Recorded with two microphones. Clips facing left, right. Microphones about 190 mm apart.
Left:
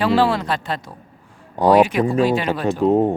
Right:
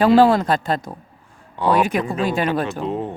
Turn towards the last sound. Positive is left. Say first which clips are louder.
# left 9 dB
turn(degrees=45)  # may be behind; listen again after turning